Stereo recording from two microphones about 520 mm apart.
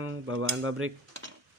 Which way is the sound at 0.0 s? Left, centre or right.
Right.